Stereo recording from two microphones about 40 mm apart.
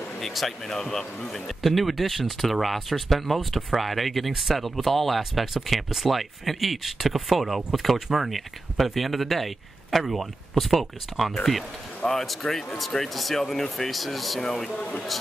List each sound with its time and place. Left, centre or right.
0.2 s speech: centre
0.7 s speech: centre
1.6 s speech: centre
14.4 s speech: centre
14.8 s speech: left